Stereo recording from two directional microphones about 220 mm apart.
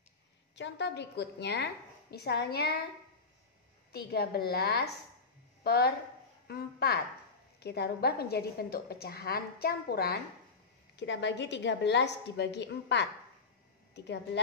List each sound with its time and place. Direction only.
0.6 s a woman's voice: 55° left (ahead or behind)
3.9 s a woman's voice: 45° left (ahead or behind)
11.0 s a woman's voice: 55° left (ahead or behind)